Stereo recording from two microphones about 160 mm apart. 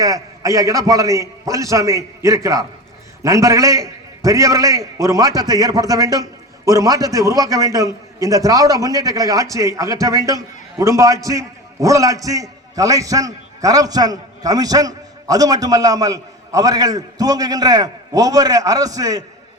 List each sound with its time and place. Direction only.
0.0 s a man's voice: 20° right (ahead or behind)